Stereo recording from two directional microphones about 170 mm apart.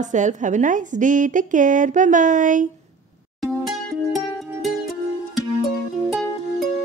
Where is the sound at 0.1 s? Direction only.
45° right (ahead or behind).